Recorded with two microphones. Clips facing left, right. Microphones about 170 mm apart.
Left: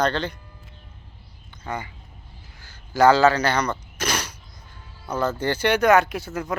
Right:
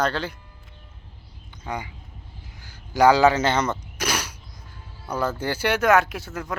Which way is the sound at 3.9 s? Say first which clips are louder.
Even; 10° right (ahead or behind).